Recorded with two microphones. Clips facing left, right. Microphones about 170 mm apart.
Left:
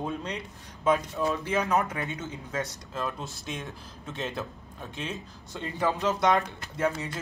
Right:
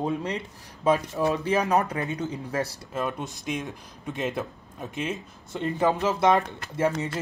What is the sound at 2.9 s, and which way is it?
Speech, 15° right (ahead or behind).